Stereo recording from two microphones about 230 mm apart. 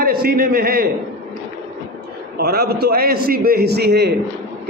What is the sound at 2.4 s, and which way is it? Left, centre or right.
A man's voice, right.